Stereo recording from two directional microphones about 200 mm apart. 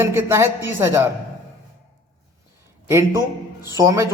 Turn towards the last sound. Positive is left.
turn(degrees=-15)  # may be behind; listen again after turning